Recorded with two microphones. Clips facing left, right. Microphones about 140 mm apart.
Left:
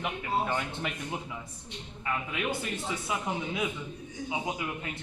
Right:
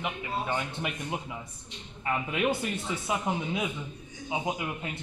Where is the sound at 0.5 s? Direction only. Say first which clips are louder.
Right 1 dB; 15° right (ahead or behind).